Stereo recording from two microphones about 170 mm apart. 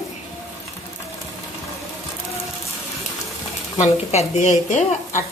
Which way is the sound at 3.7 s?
40° left (ahead or behind).